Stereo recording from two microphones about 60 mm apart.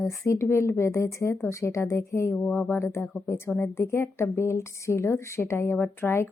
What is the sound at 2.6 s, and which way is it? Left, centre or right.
Speech, left.